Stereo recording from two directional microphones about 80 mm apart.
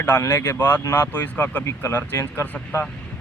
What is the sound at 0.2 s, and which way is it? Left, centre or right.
Speech, left.